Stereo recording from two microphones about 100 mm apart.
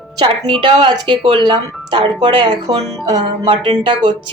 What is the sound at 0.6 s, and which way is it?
Speech, 50° right (ahead or behind).